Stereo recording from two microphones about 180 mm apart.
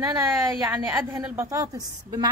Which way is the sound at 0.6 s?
15° right (ahead or behind).